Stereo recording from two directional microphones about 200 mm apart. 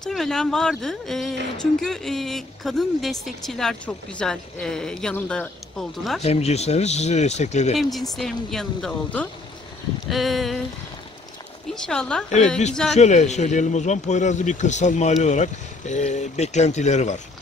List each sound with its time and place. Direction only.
0.0 s speech: centre (ahead or behind)
6.2 s a man's voice: 30° left (ahead or behind)
7.7 s speech: centre (ahead or behind)
11.7 s speech: 5° left (ahead or behind)
12.9 s a man's voice: 35° left (ahead or behind)